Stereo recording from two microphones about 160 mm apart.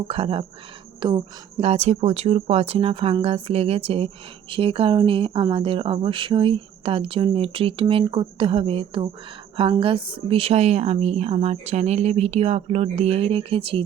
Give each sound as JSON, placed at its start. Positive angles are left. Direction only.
{"t": 0.1, "sound": "speech", "side_deg": -35}